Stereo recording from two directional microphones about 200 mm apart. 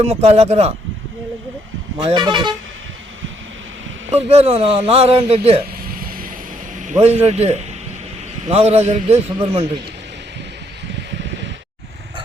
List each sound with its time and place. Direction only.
0.0 s a man's voice: 30° right (ahead or behind)
2.0 s speech: 20° right (ahead or behind)
4.3 s speech: 30° right (ahead or behind)
5.9 s vehicle: 45° right (ahead or behind)
6.8 s a man's voice: 35° right (ahead or behind)